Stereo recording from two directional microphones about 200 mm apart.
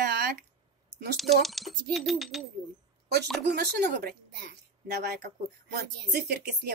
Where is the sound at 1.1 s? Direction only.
Centre (ahead or behind).